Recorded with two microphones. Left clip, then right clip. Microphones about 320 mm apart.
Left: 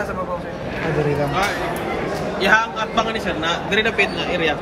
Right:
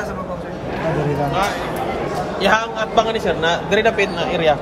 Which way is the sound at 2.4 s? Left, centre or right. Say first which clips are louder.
Left 1 dB; right.